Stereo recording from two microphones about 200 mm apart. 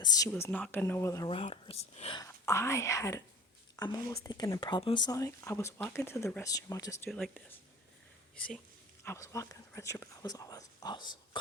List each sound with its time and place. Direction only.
0.0 s speech: 20° left (ahead or behind)
1.3 s speech: 30° left (ahead or behind)
2.2 s speech: 15° left (ahead or behind)
7.1 s speech: 5° left (ahead or behind)
9.0 s speech: 15° left (ahead or behind)